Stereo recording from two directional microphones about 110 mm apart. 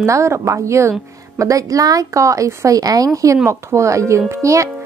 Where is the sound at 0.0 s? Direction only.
25° right (ahead or behind).